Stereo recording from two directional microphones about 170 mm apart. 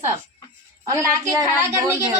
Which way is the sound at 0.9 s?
15° right (ahead or behind).